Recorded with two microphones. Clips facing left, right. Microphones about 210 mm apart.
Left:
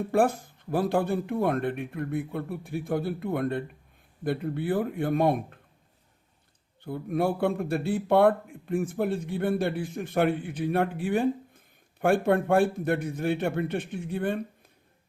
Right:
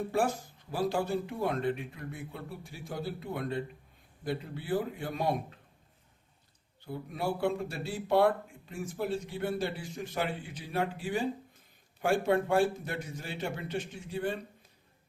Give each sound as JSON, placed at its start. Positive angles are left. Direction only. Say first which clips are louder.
{"t": 0.1, "sound": "speech", "louder": "left 9 dB", "side_deg": 55}
{"t": 6.8, "sound": "speech", "louder": "left 7 dB", "side_deg": 55}